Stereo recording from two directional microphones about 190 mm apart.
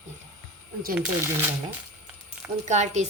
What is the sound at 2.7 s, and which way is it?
Speech, 35° right (ahead or behind).